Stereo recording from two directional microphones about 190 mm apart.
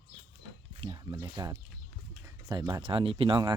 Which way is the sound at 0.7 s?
25° right (ahead or behind).